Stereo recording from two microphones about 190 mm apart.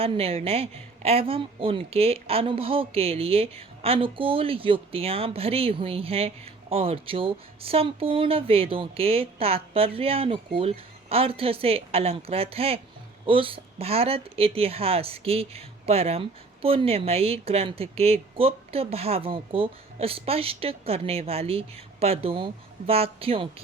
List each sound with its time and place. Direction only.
0.0 s a woman's voice: 30° right (ahead or behind)